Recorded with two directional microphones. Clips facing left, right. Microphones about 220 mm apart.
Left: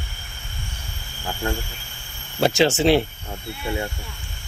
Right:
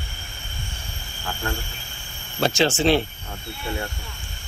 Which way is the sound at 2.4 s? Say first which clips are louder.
Left 2 dB; 20° left (ahead or behind).